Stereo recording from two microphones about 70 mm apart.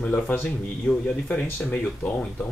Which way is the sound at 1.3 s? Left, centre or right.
Left.